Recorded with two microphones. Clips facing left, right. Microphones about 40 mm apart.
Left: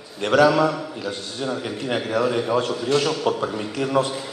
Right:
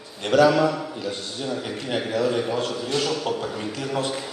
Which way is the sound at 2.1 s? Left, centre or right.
Left.